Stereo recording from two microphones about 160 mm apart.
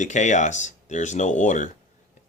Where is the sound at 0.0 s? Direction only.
50° left (ahead or behind).